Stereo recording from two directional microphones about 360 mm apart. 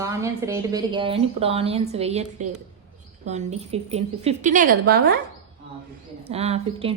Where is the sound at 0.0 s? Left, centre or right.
Centre.